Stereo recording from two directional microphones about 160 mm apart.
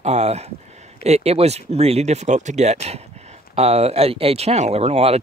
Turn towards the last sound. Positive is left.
turn(degrees=-40)  # may be behind; listen again after turning